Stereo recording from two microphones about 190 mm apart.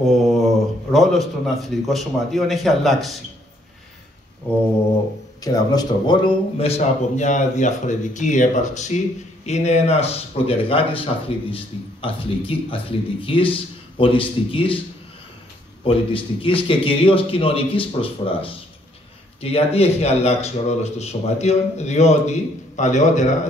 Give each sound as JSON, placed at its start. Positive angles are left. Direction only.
{"t": 0.9, "sound": "a man's voice", "side_deg": 0}
{"t": 5.4, "sound": "speech", "side_deg": 20}
{"t": 15.8, "sound": "speech", "side_deg": 30}